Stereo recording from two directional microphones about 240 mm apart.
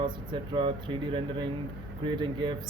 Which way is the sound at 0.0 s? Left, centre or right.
Centre.